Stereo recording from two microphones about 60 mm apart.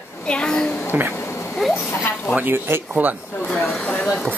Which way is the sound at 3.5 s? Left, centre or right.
Centre.